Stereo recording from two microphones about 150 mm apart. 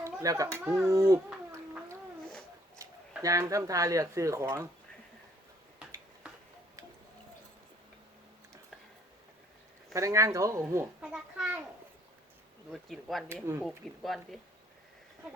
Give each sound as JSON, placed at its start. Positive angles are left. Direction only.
{"t": 0.0, "sound": "a sound", "side_deg": -20}
{"t": 0.9, "sound": "speech", "side_deg": -20}
{"t": 2.8, "sound": "a sound", "side_deg": -20}
{"t": 3.2, "sound": "speech", "side_deg": -20}
{"t": 9.9, "sound": "speech", "side_deg": -20}
{"t": 11.0, "sound": "a child's voice", "side_deg": -5}
{"t": 12.7, "sound": "speech", "side_deg": 0}
{"t": 13.2, "sound": "speech", "side_deg": -15}
{"t": 13.7, "sound": "speech", "side_deg": 0}